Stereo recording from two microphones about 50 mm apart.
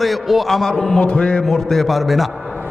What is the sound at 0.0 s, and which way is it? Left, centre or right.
A man's voice, centre.